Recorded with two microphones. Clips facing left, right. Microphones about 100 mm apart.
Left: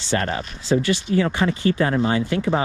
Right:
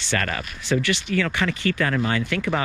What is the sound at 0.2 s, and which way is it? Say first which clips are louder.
Speech: left 3 dB; 30° left (ahead or behind).